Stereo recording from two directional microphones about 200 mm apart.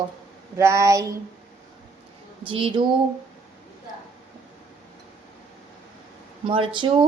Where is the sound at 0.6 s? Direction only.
15° right (ahead or behind).